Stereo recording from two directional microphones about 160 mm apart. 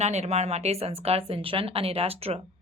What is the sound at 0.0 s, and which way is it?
A woman's voice, 40° right (ahead or behind).